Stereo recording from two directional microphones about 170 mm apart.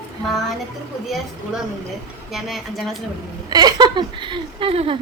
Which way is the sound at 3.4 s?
25° right (ahead or behind).